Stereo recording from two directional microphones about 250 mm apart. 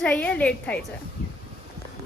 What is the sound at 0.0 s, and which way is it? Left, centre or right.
Speech, centre.